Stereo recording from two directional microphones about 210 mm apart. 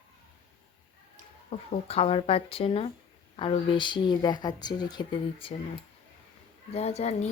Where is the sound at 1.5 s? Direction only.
30° left (ahead or behind).